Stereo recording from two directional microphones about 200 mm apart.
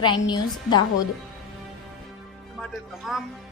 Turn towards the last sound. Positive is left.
turn(degrees=0)  # may be behind; listen again after turning